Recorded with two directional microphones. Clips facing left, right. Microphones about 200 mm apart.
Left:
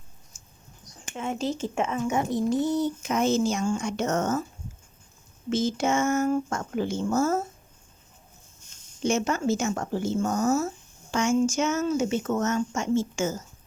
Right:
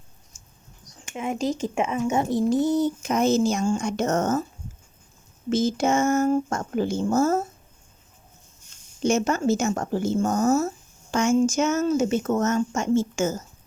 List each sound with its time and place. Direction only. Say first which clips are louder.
1.1 s speech: right 3 dB; 15° right (ahead or behind)
2.0 s speech: right 4 dB; 30° right (ahead or behind)
2.6 s speech: right 3 dB; 45° right (ahead or behind)
5.5 s speech: right 3 dB; 40° right (ahead or behind)
9.0 s speech: right 3 dB; 40° right (ahead or behind)